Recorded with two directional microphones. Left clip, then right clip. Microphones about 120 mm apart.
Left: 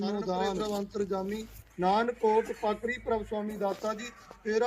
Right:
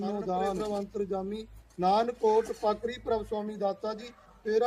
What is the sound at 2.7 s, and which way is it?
Speech, 15° right (ahead or behind).